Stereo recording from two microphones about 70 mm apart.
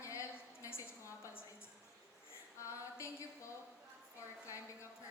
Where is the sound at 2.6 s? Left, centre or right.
Left.